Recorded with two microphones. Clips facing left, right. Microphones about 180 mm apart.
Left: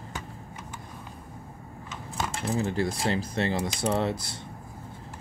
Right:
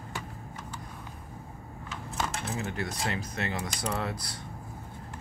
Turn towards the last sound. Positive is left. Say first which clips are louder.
# left 6 dB
turn(degrees=25)  # may be behind; listen again after turning